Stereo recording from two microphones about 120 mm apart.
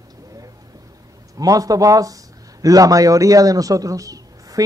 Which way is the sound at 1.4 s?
30° right (ahead or behind).